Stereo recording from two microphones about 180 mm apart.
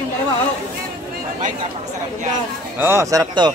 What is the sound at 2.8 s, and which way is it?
Speech, 15° right (ahead or behind).